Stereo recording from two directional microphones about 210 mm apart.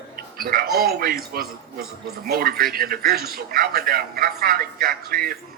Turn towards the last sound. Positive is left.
turn(degrees=-45)  # may be behind; listen again after turning